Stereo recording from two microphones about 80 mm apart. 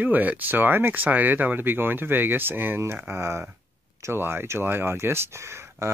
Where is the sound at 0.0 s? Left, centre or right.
Right.